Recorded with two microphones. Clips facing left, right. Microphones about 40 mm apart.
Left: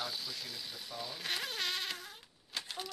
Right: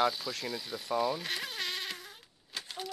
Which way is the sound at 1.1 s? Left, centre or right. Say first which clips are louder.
Right 3 dB; centre.